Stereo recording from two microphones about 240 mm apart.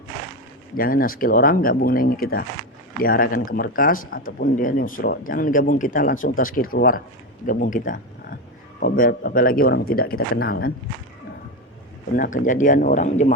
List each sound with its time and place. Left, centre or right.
0.8 s speech: left
12.1 s speech: left